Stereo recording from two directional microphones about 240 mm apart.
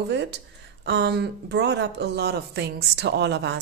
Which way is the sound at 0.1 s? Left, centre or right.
Right.